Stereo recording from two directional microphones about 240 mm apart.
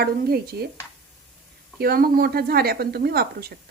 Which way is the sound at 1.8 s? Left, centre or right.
Right.